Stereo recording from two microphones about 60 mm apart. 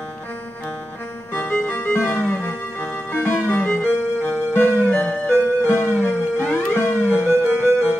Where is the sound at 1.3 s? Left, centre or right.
Left.